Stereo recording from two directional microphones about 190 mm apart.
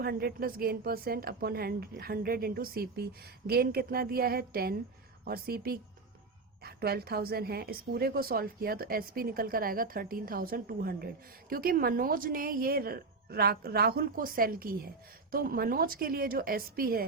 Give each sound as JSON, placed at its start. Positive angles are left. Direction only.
{"t": 0.0, "sound": "a woman's voice", "side_deg": -55}